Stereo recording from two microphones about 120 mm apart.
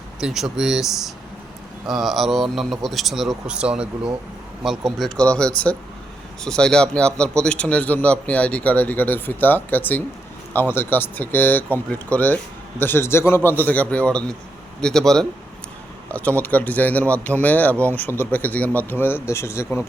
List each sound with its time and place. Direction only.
0.2 s a man's voice: 5° right (ahead or behind); by 19.8 s 20° left (ahead or behind)